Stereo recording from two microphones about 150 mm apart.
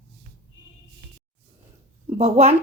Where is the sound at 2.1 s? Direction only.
45° right (ahead or behind).